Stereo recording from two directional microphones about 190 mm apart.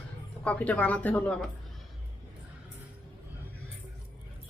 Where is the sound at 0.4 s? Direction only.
5° left (ahead or behind).